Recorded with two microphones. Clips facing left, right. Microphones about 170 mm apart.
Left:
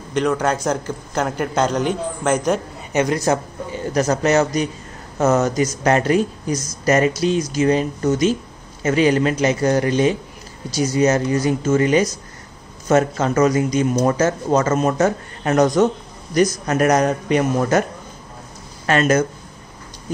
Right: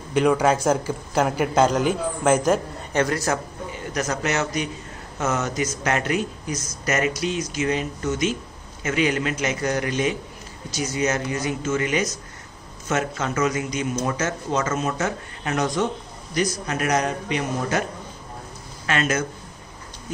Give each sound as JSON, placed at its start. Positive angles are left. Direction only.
{"t": 0.1, "sound": "a man's voice", "side_deg": -10}
{"t": 2.9, "sound": "speech", "side_deg": 15}
{"t": 3.7, "sound": "a man's voice", "side_deg": 30}
{"t": 18.9, "sound": "speech", "side_deg": 40}